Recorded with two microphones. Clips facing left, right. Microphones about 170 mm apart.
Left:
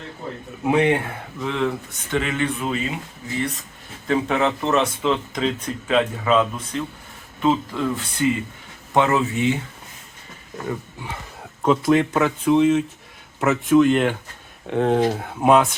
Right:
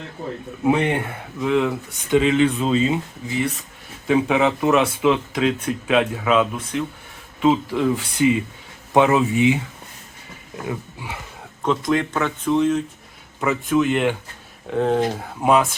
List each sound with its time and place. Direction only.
0.6 s speech: centre (ahead or behind)
2.0 s speech: 15° right (ahead or behind)
4.0 s speech: 10° right (ahead or behind)
10.7 s speech: 10° right (ahead or behind)
11.6 s speech: 5° left (ahead or behind)